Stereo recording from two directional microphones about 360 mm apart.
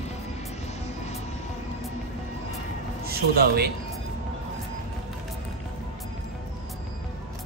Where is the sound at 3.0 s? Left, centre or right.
Right.